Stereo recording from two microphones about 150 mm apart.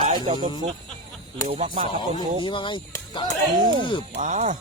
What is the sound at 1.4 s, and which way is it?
Speech, 45° right (ahead or behind).